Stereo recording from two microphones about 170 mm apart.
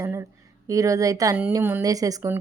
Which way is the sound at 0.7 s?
20° right (ahead or behind).